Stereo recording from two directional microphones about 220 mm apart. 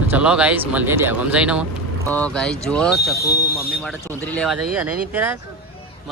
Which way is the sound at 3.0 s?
45° left (ahead or behind).